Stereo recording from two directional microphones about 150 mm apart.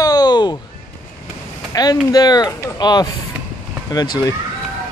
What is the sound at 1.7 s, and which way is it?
Speech, 25° left (ahead or behind).